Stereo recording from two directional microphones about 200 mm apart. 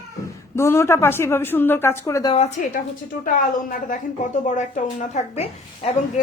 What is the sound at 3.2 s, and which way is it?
A woman's voice, 40° left (ahead or behind).